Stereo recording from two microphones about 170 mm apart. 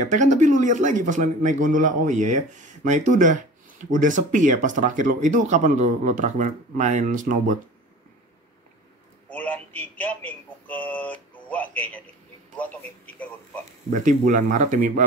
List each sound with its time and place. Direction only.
0.0 s speech: 45° right (ahead or behind)
9.3 s a sound: 10° left (ahead or behind)
12.5 s a man's voice: 10° left (ahead or behind)
14.0 s speech: 50° right (ahead or behind)